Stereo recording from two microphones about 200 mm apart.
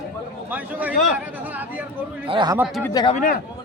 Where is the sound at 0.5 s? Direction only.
10° right (ahead or behind).